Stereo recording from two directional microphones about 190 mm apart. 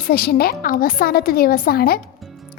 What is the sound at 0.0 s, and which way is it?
A woman's voice, 55° left (ahead or behind).